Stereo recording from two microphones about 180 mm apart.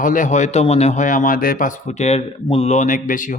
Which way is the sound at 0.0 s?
45° left (ahead or behind).